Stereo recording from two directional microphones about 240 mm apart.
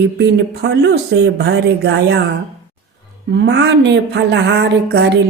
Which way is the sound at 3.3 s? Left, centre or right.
Right.